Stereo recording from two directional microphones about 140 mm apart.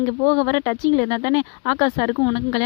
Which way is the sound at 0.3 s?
30° left (ahead or behind).